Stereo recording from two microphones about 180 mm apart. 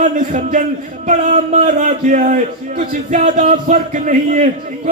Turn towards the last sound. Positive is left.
turn(degrees=-45)  # may be behind; listen again after turning